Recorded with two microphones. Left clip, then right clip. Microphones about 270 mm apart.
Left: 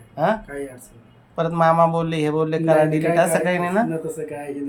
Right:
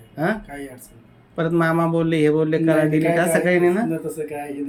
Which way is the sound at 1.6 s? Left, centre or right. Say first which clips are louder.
Left 3 dB; left.